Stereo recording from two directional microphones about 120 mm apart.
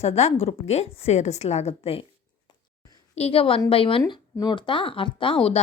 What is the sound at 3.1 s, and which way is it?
Speech, 55° left (ahead or behind).